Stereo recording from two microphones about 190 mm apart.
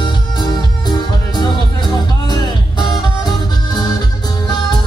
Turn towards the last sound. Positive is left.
turn(degrees=20)  # may be behind; listen again after turning